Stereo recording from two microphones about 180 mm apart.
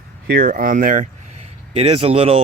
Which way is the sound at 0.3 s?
50° right (ahead or behind).